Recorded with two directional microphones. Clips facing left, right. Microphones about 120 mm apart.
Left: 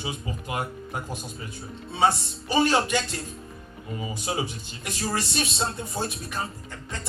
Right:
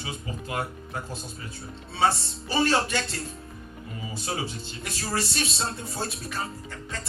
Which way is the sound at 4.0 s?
15° left (ahead or behind).